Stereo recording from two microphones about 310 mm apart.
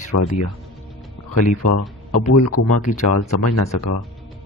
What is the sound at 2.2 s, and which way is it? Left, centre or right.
Speech, left.